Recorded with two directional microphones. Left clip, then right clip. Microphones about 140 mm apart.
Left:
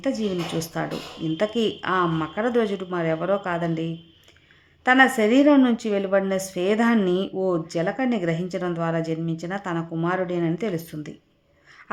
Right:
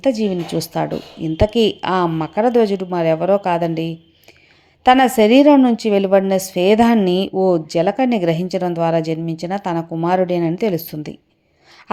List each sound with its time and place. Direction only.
0.0 s a woman's voice: 30° right (ahead or behind)